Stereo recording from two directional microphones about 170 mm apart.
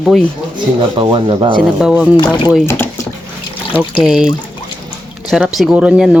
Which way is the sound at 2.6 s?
15° left (ahead or behind).